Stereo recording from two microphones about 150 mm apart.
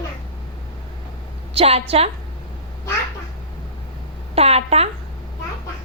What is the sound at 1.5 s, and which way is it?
Speech, 45° right (ahead or behind).